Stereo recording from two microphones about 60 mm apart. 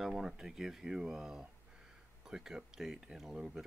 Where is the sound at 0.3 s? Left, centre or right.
Centre.